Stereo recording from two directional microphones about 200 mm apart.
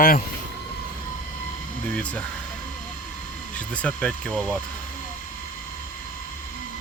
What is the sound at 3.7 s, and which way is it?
Speech, 5° left (ahead or behind).